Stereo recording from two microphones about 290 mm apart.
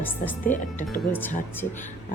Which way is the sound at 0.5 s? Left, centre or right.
Left.